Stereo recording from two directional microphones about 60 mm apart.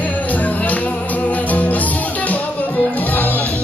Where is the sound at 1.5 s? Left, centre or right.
Left.